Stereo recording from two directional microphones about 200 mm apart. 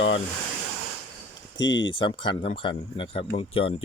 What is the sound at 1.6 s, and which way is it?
Speech, 65° left (ahead or behind).